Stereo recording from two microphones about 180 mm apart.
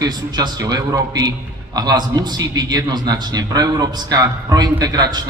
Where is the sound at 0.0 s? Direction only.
20° right (ahead or behind).